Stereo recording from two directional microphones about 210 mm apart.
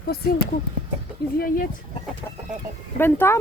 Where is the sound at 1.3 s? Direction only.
45° left (ahead or behind).